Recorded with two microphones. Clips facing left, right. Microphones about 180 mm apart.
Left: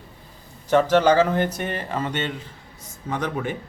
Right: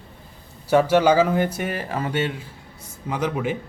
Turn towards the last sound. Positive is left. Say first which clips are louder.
# right 2 dB
turn(degrees=-10)  # may be behind; listen again after turning